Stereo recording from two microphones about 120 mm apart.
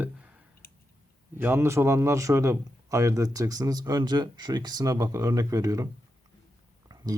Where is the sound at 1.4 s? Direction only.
20° right (ahead or behind).